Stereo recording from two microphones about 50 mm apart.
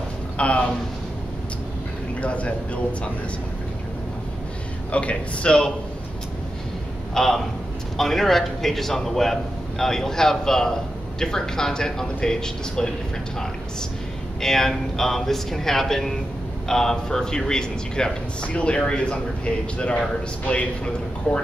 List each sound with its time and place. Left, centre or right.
0.4 s a man's voice: left
2.2 s a man's voice: left
4.9 s a man's voice: left
7.2 s a man's voice: centre
14.4 s a man's voice: centre; by 21.4 s left